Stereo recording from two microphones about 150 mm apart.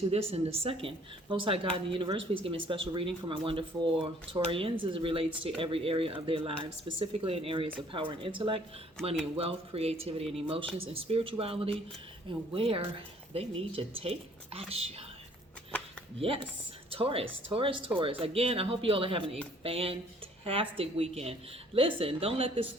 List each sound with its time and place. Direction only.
0.1 s speech: 40° right (ahead or behind)
16.1 s speech: 40° right (ahead or behind)